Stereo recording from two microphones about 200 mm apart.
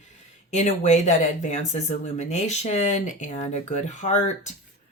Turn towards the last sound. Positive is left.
turn(degrees=35)  # may be behind; listen again after turning